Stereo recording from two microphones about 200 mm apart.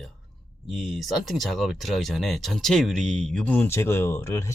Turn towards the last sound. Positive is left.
turn(degrees=10)  # may be behind; listen again after turning